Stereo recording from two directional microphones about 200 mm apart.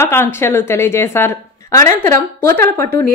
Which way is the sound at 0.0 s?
10° left (ahead or behind).